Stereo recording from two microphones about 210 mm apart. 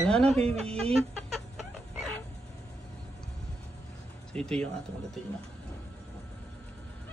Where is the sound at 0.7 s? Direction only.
30° right (ahead or behind).